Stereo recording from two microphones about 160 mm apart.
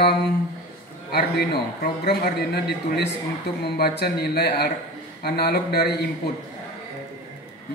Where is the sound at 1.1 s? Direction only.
80° left.